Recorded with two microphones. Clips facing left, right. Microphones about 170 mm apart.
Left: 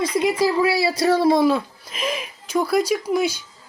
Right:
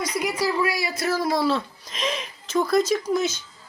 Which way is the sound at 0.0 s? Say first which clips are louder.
Left 6 dB; 25° left (ahead or behind).